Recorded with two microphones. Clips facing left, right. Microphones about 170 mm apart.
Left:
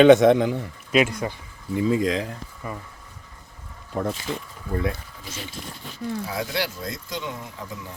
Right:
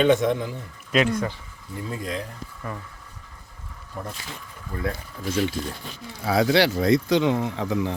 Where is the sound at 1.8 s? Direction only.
90° left.